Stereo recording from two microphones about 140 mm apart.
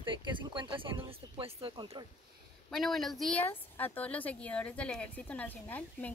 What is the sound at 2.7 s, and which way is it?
A woman's voice, centre (ahead or behind).